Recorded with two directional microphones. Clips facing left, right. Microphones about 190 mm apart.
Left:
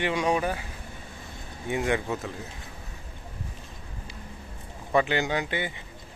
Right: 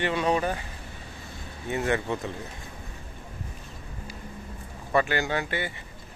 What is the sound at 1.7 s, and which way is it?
Speech, 15° left (ahead or behind).